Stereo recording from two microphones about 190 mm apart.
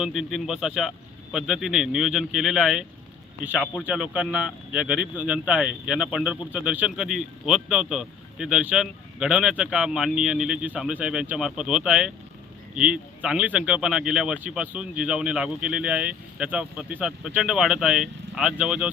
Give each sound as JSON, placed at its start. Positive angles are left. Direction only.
{"t": 0.0, "sound": "speech", "side_deg": 0}